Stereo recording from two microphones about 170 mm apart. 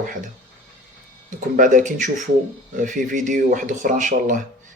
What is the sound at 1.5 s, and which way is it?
Speech, 50° right (ahead or behind).